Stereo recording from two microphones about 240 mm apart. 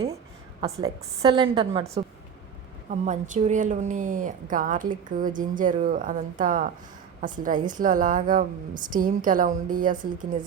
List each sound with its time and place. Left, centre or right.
0.6 s a woman's voice: right
2.9 s speech: right
7.7 s speech: right